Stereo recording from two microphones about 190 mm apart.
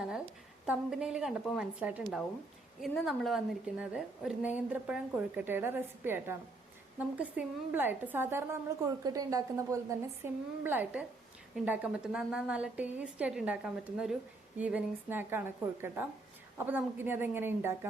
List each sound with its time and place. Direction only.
0.6 s a woman's voice: 5° right (ahead or behind)